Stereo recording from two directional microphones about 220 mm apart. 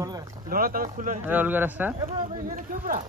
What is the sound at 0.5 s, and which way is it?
Speech, 40° right (ahead or behind).